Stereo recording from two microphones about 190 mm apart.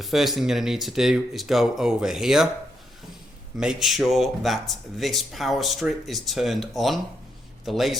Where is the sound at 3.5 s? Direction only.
5° right (ahead or behind).